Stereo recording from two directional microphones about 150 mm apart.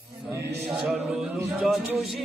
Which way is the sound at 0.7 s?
5° right (ahead or behind).